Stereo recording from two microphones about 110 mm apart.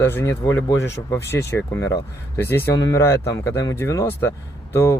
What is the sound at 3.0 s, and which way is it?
Speech, 25° left (ahead or behind).